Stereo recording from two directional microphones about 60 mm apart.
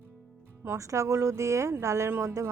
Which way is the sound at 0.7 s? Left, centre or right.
Right.